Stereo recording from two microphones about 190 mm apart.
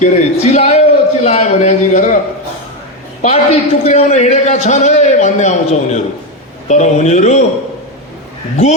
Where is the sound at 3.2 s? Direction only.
35° left (ahead or behind).